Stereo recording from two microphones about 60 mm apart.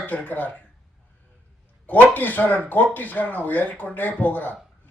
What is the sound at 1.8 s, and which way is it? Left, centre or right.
A man's voice, left.